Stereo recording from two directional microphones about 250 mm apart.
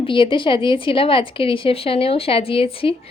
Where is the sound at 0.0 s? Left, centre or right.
Centre.